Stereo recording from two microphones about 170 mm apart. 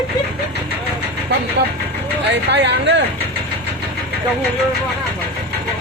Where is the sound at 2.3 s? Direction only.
90° right.